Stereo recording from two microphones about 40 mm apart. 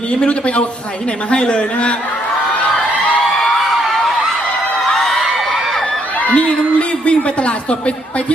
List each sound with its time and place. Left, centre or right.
0.3 s a man's voice: left
4.9 s a sound: centre
6.1 s a woman's voice: left